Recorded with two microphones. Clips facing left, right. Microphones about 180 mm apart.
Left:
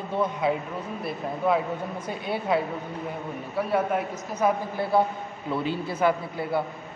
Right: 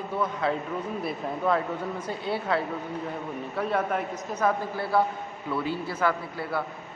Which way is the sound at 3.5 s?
5° left (ahead or behind).